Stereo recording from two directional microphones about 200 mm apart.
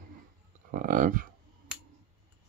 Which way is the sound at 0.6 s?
40° right (ahead or behind).